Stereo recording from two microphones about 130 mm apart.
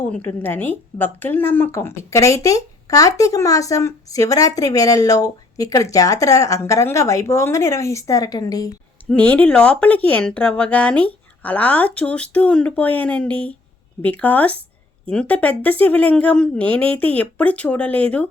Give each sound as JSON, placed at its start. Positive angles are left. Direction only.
{"t": 0.1, "sound": "speech", "side_deg": 15}
{"t": 9.0, "sound": "speech", "side_deg": 10}